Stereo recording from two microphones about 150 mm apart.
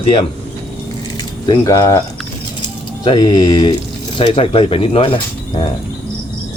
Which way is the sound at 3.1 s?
25° left (ahead or behind).